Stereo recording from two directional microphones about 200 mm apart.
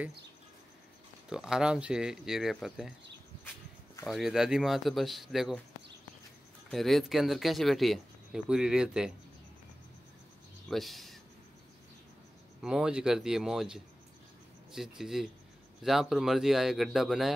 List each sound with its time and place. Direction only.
1.3 s speech: 5° right (ahead or behind)
4.1 s speech: centre (ahead or behind)
6.7 s speech: centre (ahead or behind)
10.7 s speech: centre (ahead or behind)
12.6 s speech: 5° right (ahead or behind)